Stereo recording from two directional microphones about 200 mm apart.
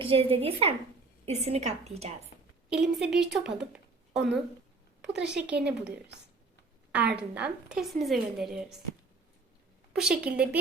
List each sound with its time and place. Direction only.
0.0 s a woman's voice: 30° right (ahead or behind)
2.6 s a woman's voice: 5° right (ahead or behind)
6.9 s a woman's voice: 5° right (ahead or behind)
9.9 s a woman's voice: 5° right (ahead or behind)